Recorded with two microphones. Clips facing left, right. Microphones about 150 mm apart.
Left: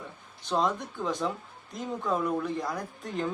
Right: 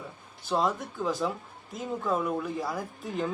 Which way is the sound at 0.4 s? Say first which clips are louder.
Even; 5° right (ahead or behind).